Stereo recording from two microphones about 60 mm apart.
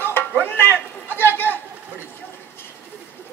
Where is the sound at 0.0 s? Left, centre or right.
Left.